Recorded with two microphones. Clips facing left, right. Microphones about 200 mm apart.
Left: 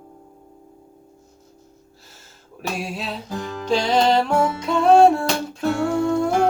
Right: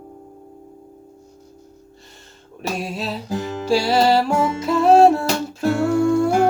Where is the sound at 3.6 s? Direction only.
10° right (ahead or behind).